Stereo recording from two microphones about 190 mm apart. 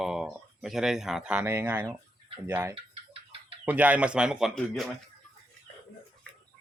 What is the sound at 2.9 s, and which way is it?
Bird, 30° right (ahead or behind).